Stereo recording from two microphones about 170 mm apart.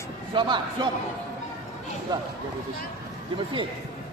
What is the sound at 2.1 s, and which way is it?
Speech, 20° right (ahead or behind).